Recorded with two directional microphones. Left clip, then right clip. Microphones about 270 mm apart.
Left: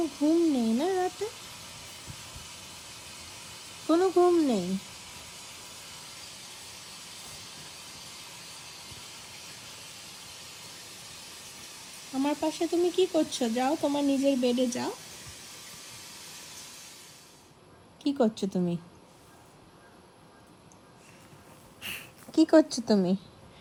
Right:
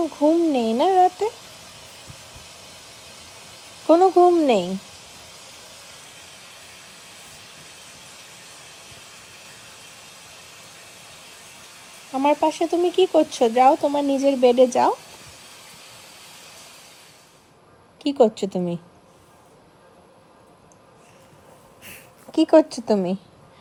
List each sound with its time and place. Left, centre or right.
0.2 s speech: centre
3.8 s speech: centre
12.1 s speech: centre
18.0 s speech: centre
21.8 s a sound: centre
22.4 s speech: centre
22.7 s speech: centre